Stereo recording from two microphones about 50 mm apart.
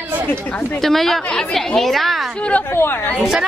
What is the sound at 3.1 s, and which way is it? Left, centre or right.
Speech, centre.